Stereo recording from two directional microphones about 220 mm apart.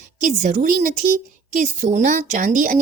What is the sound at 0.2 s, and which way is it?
Speech, 40° right (ahead or behind).